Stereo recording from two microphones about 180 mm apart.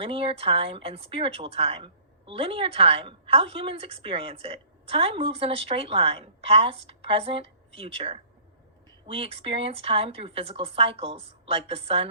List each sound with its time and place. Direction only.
0.0 s speech: 30° right (ahead or behind)